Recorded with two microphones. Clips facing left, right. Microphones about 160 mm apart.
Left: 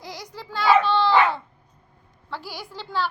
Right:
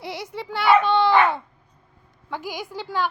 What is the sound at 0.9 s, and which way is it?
Dog, 20° right (ahead or behind).